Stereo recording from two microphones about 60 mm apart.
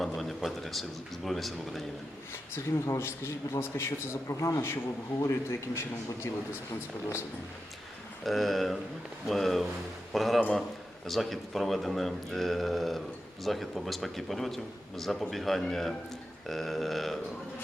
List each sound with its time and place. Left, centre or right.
0.0 s speech: centre
2.3 s a man's voice: left
8.2 s speech: centre